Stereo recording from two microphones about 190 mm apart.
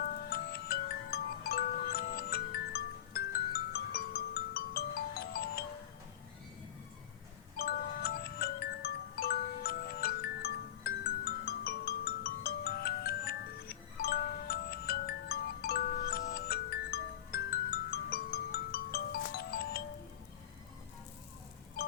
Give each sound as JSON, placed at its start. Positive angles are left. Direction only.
{"t": 0.0, "sound": "chime", "side_deg": 55}
{"t": 3.7, "sound": "marimba", "side_deg": 55}
{"t": 7.5, "sound": "music", "side_deg": 55}
{"t": 11.4, "sound": "marimba", "side_deg": 55}
{"t": 21.8, "sound": "telephone dialing", "side_deg": 50}